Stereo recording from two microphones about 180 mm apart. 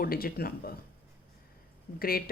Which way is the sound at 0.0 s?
55° left (ahead or behind).